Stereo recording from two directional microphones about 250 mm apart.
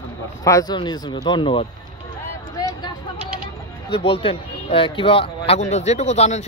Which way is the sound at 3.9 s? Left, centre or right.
Left.